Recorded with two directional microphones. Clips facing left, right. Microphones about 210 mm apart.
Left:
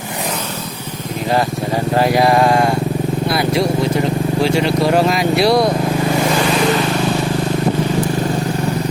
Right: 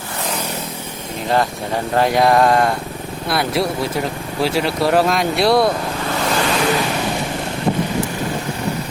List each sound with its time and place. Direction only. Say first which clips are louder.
2.0 s speech: even; 5° left (ahead or behind)